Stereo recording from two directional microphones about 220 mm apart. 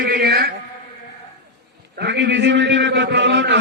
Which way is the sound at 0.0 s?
40° right (ahead or behind).